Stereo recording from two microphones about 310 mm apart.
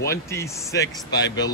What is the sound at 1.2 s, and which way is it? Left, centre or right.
Speech, left.